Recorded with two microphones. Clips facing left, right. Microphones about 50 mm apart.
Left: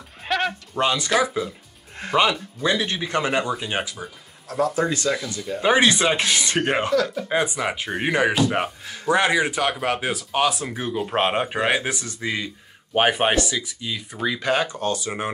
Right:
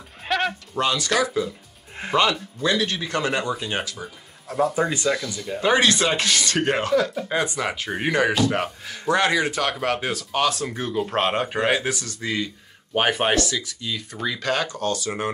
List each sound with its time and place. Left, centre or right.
0.2 s bleat: centre
0.7 s speech: left
2.0 s a sound: centre
2.6 s speech: centre
4.5 s speech: centre
5.6 s speech: centre